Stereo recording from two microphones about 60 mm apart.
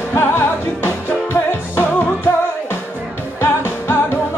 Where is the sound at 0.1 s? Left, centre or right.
Left.